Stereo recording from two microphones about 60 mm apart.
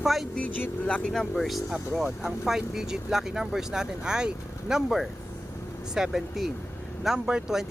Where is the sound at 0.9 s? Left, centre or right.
Left.